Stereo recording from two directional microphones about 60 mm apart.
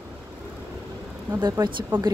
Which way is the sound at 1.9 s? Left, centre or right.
Right.